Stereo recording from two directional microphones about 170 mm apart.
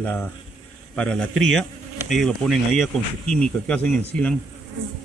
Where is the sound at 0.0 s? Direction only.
10° left (ahead or behind).